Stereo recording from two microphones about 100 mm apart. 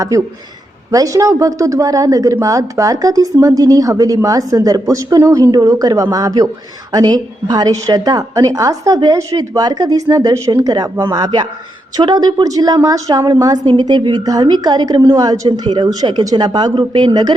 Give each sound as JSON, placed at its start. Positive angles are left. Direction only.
{"t": 0.1, "sound": "a woman's voice", "side_deg": -35}